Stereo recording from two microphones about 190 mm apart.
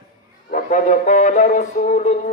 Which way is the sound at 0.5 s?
40° left (ahead or behind).